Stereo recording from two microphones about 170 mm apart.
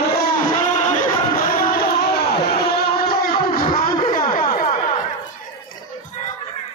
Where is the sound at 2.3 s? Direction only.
65° left (ahead or behind).